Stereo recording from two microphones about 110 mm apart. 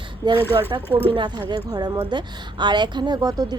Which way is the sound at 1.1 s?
45° right (ahead or behind).